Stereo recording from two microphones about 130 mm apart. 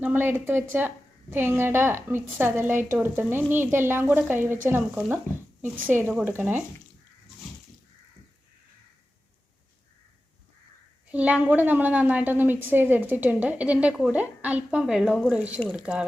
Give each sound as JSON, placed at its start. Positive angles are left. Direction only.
{"t": 0.0, "sound": "a woman's voice", "side_deg": -15}
{"t": 5.6, "sound": "a woman's voice", "side_deg": -15}
{"t": 11.1, "sound": "a woman's voice", "side_deg": -10}